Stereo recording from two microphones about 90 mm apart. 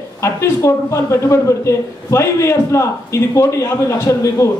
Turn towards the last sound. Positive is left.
turn(degrees=35)  # may be behind; listen again after turning